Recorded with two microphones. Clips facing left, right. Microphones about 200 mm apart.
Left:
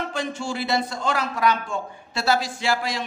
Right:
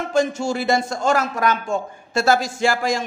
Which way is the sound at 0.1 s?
45° right (ahead or behind).